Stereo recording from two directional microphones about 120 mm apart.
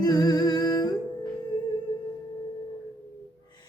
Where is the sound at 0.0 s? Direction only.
35° left (ahead or behind).